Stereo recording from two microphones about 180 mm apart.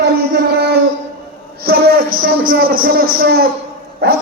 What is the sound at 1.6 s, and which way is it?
A man's voice, 60° right (ahead or behind).